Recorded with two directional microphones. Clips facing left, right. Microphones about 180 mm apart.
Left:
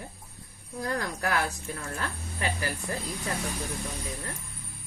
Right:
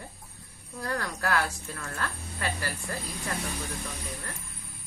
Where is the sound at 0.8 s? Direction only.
15° left (ahead or behind).